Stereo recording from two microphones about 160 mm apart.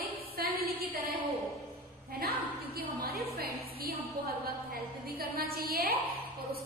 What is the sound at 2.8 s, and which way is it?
A woman's voice, 70° right (ahead or behind).